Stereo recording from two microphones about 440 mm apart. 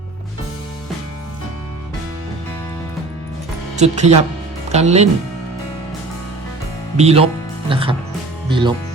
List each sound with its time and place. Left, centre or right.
3.8 s speech: centre
6.9 s speech: centre